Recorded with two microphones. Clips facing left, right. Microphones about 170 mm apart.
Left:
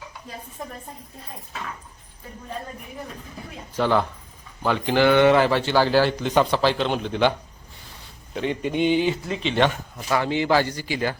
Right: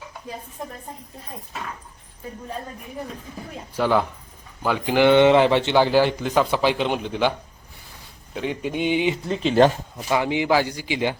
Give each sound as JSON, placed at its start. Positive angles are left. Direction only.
{"t": 3.8, "sound": "a man's voice", "side_deg": -10}
{"t": 5.0, "sound": "a man's voice", "side_deg": -20}
{"t": 9.3, "sound": "speech", "side_deg": -40}
{"t": 10.1, "sound": "a man's voice", "side_deg": -15}